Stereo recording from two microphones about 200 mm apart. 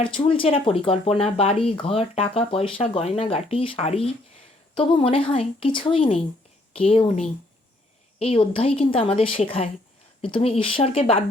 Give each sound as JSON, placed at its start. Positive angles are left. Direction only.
{"t": 0.0, "sound": "speech", "side_deg": 25}